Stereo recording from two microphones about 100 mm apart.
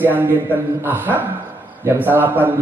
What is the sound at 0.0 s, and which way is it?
Speech, 20° right (ahead or behind).